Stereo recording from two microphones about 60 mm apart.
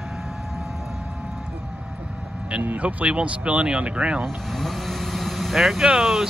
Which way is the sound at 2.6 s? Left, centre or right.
Right.